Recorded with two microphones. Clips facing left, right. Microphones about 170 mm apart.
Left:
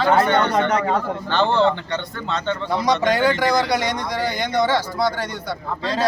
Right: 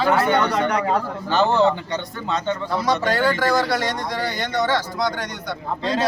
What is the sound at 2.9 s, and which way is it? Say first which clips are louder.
Speech: left 2 dB; 15° left (ahead or behind).